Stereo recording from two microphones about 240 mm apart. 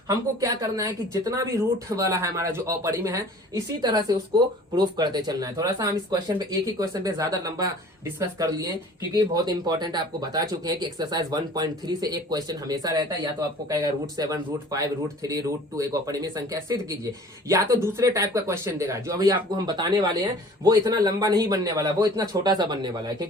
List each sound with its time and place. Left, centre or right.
0.1 s speech: centre